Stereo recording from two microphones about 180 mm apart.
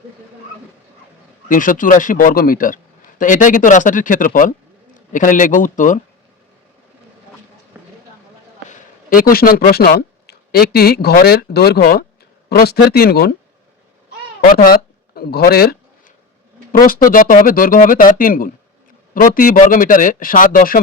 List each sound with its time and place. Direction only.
1.5 s a man's voice: 50° left (ahead or behind)
8.7 s speech: 50° left (ahead or behind)
14.4 s a sound: 55° left (ahead or behind)
17.1 s a man's voice: 50° left (ahead or behind)